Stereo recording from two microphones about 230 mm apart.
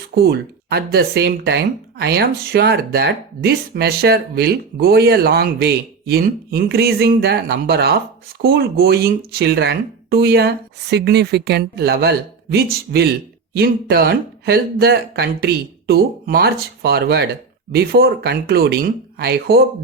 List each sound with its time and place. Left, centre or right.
0.2 s speech: right